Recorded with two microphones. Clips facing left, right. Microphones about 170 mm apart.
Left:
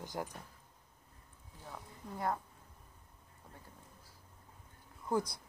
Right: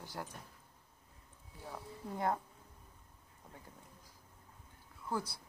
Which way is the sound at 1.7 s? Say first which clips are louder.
Right 3 dB; 20° right (ahead or behind).